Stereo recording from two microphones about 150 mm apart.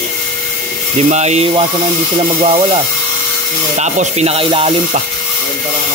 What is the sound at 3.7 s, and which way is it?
Mantra, 50° right (ahead or behind).